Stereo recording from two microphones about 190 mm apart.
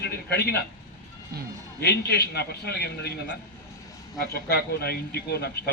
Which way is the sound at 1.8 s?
55° left (ahead or behind).